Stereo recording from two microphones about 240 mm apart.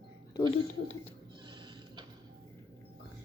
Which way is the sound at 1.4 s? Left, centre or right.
Centre.